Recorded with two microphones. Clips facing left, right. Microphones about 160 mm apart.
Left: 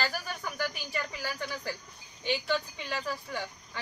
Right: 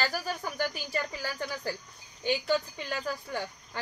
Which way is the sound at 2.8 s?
40° right (ahead or behind).